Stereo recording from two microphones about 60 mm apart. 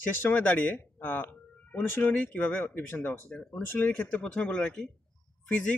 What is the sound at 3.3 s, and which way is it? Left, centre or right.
Speech, centre.